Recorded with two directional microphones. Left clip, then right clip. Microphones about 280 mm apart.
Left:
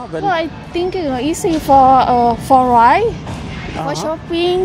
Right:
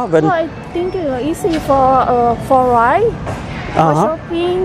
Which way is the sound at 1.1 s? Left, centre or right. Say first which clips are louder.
Even; left.